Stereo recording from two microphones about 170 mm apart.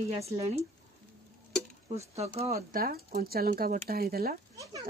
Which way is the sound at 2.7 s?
60° right (ahead or behind).